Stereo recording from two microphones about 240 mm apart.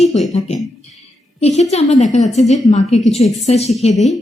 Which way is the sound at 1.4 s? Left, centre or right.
Left.